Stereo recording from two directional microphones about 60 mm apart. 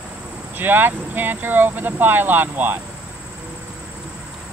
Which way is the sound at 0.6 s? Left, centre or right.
Right.